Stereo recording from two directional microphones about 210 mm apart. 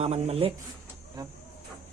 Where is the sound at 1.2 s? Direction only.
20° right (ahead or behind).